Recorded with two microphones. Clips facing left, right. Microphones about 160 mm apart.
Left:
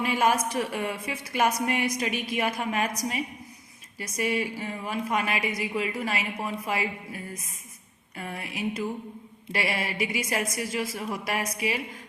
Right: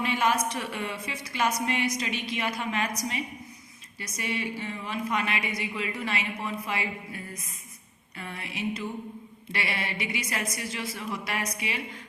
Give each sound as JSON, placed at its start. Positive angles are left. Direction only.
{"t": 0.0, "sound": "a woman's voice", "side_deg": 45}